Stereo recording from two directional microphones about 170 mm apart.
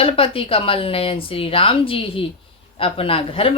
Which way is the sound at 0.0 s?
35° left (ahead or behind).